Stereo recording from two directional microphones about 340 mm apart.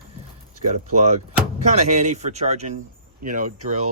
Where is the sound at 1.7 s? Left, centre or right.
Centre.